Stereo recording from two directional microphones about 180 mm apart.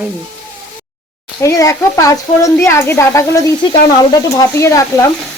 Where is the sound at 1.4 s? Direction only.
15° left (ahead or behind).